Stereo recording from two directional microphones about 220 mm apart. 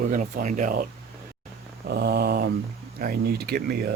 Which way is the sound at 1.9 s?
45° right (ahead or behind).